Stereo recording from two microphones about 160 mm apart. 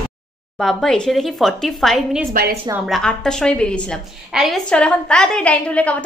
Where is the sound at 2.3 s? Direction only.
75° right (ahead or behind).